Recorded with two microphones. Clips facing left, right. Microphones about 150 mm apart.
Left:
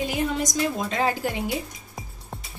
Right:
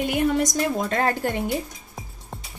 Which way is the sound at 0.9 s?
55° right (ahead or behind).